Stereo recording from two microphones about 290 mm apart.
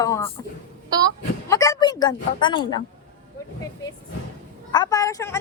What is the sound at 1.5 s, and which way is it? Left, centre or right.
A woman's voice, centre.